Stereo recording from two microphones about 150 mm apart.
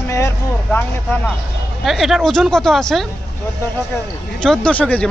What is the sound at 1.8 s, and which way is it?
Speech, centre (ahead or behind).